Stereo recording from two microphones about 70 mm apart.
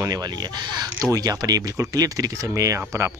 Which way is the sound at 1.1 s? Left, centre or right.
Right.